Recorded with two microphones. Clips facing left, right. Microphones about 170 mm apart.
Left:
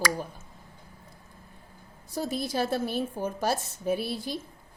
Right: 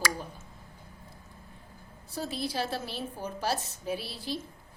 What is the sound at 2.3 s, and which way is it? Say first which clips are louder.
A woman's voice: left 5 dB; 50° left (ahead or behind).